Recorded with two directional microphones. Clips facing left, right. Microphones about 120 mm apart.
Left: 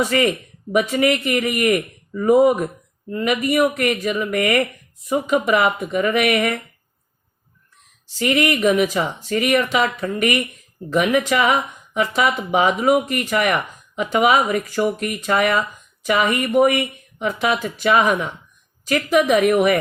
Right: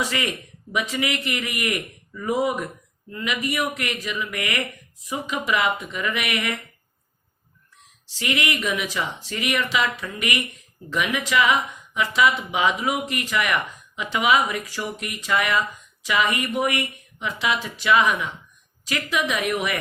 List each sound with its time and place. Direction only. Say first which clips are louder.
0.0 s speech: left 8 dB; 45° left (ahead or behind)
8.0 s speech: left 7 dB; 45° left (ahead or behind)